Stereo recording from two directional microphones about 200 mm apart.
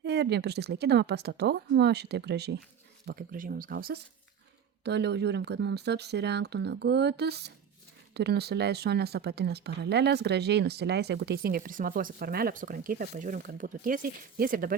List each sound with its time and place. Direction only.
0.0 s speech: 55° right (ahead or behind)
3.1 s speech: 45° right (ahead or behind)